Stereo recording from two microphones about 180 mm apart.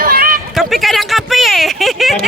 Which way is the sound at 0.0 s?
55° right (ahead or behind).